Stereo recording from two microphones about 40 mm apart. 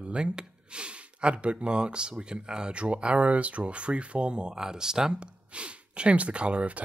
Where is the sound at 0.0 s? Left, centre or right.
Right.